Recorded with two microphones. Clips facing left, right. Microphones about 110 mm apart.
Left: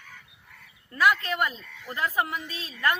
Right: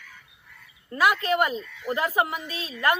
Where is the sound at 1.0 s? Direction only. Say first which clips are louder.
Right 2 dB; 15° right (ahead or behind).